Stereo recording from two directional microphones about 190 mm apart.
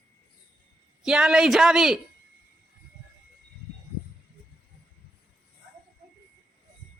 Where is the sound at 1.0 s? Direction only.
5° right (ahead or behind).